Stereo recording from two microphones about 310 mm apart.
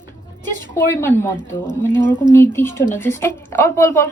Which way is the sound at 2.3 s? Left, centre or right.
Centre.